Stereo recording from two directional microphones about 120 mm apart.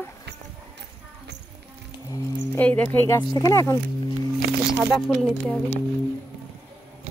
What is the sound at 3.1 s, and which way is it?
Speech, 35° left (ahead or behind).